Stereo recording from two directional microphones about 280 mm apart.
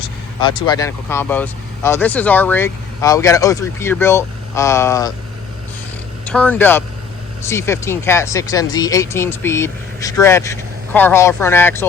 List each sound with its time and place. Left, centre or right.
0.0 s speech: centre
6.2 s speech: centre